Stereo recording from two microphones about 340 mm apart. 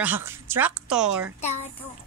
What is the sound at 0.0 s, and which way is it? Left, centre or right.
Speech, centre.